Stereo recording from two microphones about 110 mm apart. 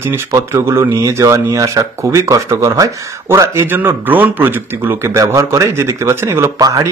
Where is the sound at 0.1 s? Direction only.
30° right (ahead or behind).